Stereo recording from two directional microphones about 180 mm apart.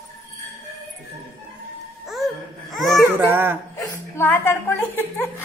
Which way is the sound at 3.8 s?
10° left (ahead or behind).